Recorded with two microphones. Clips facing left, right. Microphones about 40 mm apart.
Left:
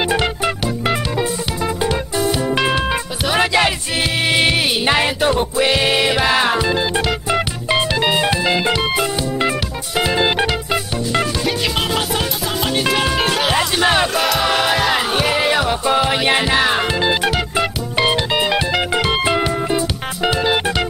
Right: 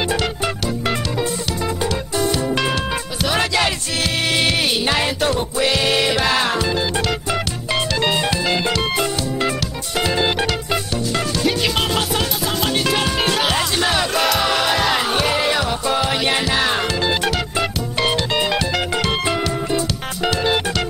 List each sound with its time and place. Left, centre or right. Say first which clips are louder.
1.8 s music: left 2 dB; centre
9.9 s music: left 2 dB; centre
12.9 s music: left 2 dB; centre